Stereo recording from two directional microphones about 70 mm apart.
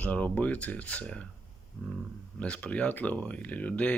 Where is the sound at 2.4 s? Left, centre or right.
Centre.